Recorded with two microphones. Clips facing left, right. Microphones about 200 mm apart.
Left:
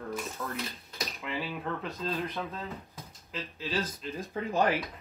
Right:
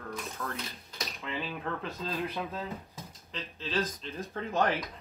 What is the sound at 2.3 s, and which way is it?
Speech, 15° right (ahead or behind).